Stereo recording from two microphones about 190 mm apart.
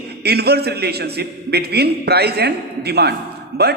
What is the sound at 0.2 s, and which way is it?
A man's voice, 60° right (ahead or behind).